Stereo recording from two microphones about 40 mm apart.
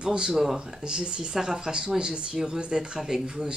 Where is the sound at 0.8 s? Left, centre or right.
Right.